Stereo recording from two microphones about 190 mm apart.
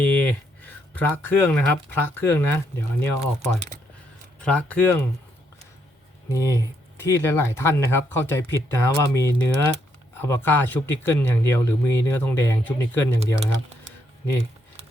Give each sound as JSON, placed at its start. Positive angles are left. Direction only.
{"t": 0.0, "sound": "speech", "side_deg": 10}
{"t": 6.3, "sound": "speech", "side_deg": 15}